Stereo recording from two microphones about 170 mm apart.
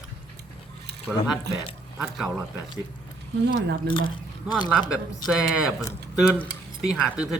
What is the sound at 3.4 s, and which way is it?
Speech, 75° right (ahead or behind).